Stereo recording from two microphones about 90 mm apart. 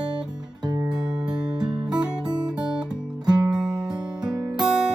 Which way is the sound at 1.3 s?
50° right (ahead or behind).